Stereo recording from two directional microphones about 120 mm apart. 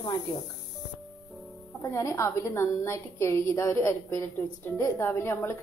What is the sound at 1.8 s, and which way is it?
A woman's voice, 25° left (ahead or behind).